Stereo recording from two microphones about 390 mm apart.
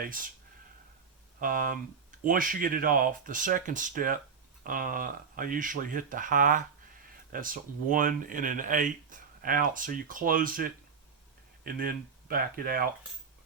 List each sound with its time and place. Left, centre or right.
1.4 s speech: right